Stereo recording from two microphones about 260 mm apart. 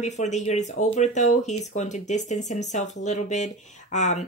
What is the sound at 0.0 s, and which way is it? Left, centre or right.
Speech, left.